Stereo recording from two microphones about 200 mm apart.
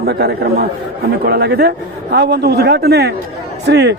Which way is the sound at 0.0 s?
55° right (ahead or behind).